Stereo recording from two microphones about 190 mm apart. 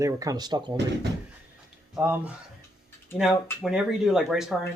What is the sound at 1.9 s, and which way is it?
Speech, 10° right (ahead or behind).